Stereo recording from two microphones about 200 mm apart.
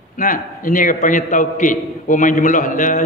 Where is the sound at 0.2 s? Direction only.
40° left (ahead or behind).